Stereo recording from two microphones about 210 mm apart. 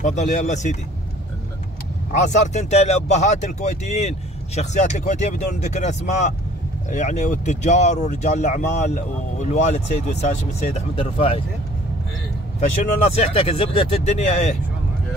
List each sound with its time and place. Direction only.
0.0 s speech: 35° left (ahead or behind)
2.1 s speech: 35° left (ahead or behind)
12.5 s speech: 30° left (ahead or behind)